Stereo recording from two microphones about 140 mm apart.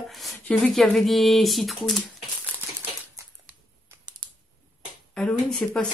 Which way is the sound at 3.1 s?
15° right (ahead or behind).